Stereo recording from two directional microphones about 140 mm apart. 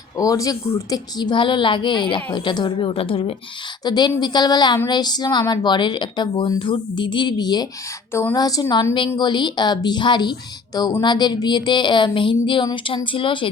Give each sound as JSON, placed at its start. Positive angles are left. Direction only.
{"t": 0.2, "sound": "a woman's voice", "side_deg": 25}
{"t": 3.8, "sound": "a woman's voice", "side_deg": 30}
{"t": 8.1, "sound": "speech", "side_deg": 15}
{"t": 8.4, "sound": "a woman's voice", "side_deg": 25}
{"t": 9.1, "sound": "a woman's voice", "side_deg": 30}